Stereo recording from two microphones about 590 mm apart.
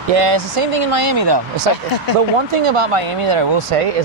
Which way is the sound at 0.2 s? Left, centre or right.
Right.